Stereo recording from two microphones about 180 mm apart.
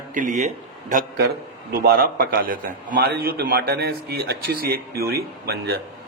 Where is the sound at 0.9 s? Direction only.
60° right (ahead or behind).